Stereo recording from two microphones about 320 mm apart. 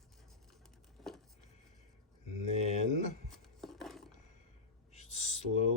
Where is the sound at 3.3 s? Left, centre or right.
Centre.